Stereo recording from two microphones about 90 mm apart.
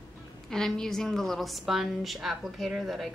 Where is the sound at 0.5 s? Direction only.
5° left (ahead or behind).